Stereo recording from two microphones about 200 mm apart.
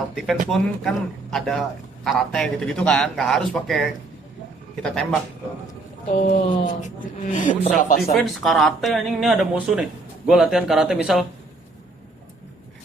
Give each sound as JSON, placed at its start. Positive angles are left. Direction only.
{"t": 0.3, "sound": "a man's voice", "side_deg": 0}
{"t": 6.2, "sound": "speech", "side_deg": 45}
{"t": 8.1, "sound": "a man's voice", "side_deg": 0}